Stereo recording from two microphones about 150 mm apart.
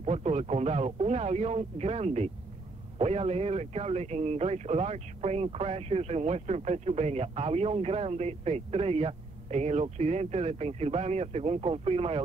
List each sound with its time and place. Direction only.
0.0 s speech: 45° right (ahead or behind)